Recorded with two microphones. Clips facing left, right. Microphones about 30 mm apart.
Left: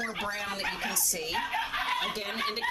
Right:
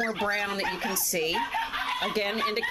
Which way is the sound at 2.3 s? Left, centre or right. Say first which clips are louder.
Right 3 dB; centre.